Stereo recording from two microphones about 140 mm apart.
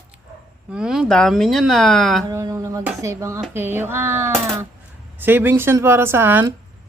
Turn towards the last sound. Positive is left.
turn(degrees=-15)  # may be behind; listen again after turning